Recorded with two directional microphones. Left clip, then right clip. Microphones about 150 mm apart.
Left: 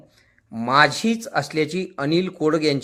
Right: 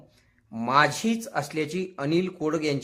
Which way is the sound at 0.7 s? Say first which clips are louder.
Left 5 dB; 20° left (ahead or behind).